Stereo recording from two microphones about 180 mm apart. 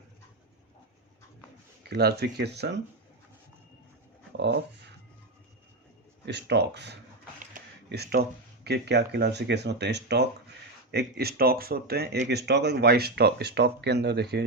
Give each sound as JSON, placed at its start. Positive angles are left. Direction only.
{"t": 1.8, "sound": "speech", "side_deg": -60}
{"t": 4.4, "sound": "a sound", "side_deg": -70}
{"t": 6.2, "sound": "speech", "side_deg": -70}